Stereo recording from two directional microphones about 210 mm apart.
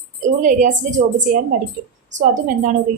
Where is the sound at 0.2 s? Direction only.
35° right (ahead or behind).